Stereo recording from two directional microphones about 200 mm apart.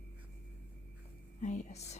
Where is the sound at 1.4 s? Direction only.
35° left (ahead or behind).